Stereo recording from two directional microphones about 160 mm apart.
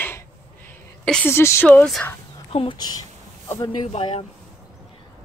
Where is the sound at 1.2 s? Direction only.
15° left (ahead or behind).